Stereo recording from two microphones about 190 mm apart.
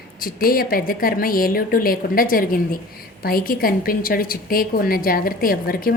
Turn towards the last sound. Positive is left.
turn(degrees=50)  # may be behind; listen again after turning